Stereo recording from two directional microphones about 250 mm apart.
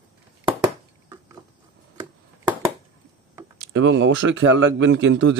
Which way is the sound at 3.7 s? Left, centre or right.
Right.